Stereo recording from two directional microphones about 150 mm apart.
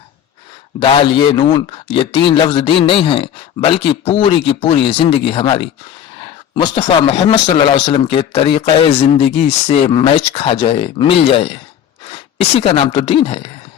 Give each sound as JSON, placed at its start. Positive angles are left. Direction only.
{"t": 0.8, "sound": "speech", "side_deg": 35}